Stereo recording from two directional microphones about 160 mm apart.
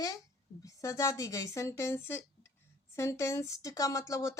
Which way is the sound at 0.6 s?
20° left (ahead or behind).